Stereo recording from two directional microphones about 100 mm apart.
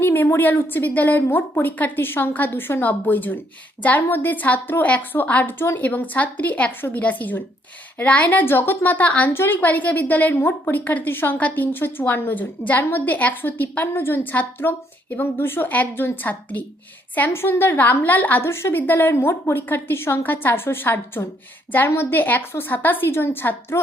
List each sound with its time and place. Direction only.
0.0 s a woman's voice: 20° left (ahead or behind)